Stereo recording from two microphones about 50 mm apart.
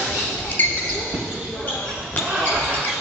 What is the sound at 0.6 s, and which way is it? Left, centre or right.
Basketball bounce, left.